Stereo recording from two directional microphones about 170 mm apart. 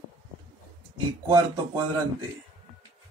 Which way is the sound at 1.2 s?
20° right (ahead or behind).